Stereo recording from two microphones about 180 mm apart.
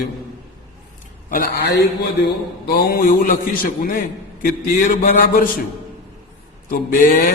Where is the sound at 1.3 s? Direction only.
60° left (ahead or behind).